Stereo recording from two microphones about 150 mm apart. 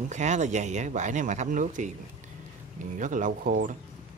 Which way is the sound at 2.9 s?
60° right (ahead or behind).